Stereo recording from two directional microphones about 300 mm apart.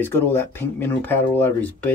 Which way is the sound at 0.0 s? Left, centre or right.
Centre.